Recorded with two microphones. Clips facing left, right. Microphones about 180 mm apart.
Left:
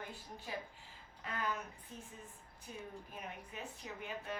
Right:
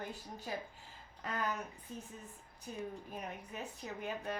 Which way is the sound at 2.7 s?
40° right (ahead or behind).